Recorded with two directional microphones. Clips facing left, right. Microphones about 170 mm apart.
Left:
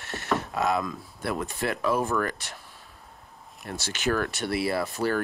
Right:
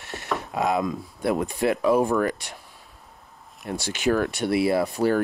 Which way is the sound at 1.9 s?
70° right (ahead or behind).